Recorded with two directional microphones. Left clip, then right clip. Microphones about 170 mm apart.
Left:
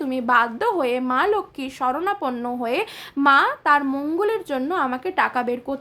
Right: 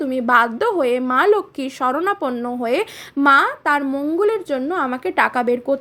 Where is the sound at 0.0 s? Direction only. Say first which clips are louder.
Right 3 dB; 15° right (ahead or behind).